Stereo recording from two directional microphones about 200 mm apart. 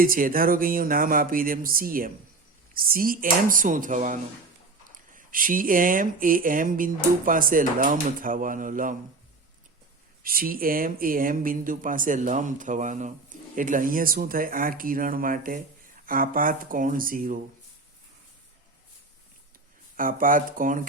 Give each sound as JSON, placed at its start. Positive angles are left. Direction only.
{"t": 0.0, "sound": "speech", "side_deg": -45}
{"t": 10.2, "sound": "speech", "side_deg": -45}
{"t": 20.0, "sound": "speech", "side_deg": -45}